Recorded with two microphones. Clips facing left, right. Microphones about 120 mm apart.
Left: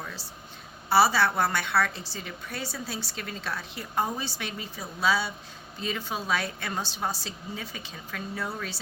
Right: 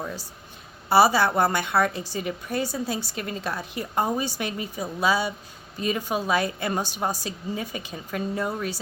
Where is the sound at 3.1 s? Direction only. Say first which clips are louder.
Right 6 dB; 45° right (ahead or behind).